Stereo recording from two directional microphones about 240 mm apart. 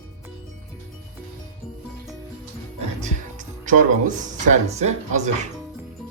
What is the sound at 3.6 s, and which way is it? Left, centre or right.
Speech, right.